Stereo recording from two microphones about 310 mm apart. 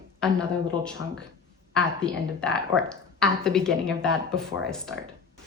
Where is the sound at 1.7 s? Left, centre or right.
Centre.